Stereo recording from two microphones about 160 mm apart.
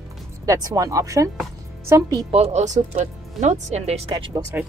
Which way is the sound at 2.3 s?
40° right (ahead or behind).